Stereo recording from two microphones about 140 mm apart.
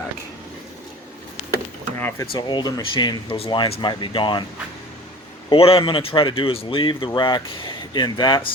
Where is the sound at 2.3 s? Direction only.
35° left (ahead or behind).